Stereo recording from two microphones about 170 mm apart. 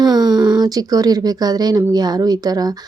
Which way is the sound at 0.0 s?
25° right (ahead or behind).